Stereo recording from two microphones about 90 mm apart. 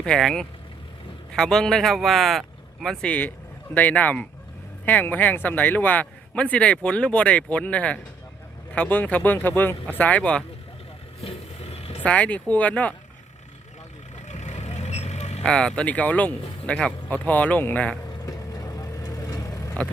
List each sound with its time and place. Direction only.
0.0 s a man's voice: 5° left (ahead or behind)
11.8 s vehicle: 90° left
12.0 s a man's voice: 15° left (ahead or behind)
15.4 s a man's voice: 10° left (ahead or behind)
18.3 s vehicle: 40° left (ahead or behind)